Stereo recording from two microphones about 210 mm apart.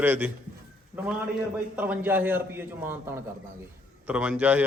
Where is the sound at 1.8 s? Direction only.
10° right (ahead or behind).